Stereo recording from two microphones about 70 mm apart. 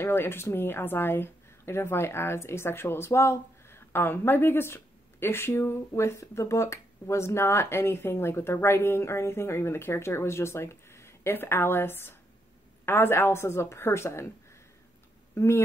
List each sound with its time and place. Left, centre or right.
0.0 s speech: left
15.3 s speech: left